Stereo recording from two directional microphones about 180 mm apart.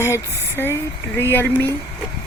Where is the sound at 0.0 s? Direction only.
15° left (ahead or behind).